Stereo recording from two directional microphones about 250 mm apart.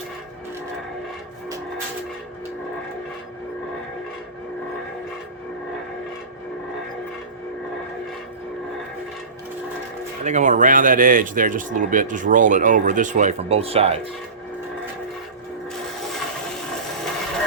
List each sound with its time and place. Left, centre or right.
10.2 s speech: right